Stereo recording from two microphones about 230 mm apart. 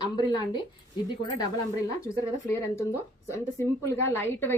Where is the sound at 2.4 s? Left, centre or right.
Centre.